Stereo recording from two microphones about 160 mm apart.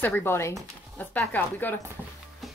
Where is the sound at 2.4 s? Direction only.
Centre (ahead or behind).